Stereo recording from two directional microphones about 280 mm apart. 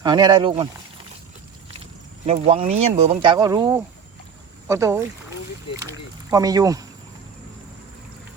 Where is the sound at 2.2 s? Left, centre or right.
Right.